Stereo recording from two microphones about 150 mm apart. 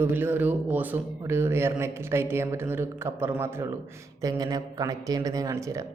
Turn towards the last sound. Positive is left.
turn(degrees=-20)  # may be behind; listen again after turning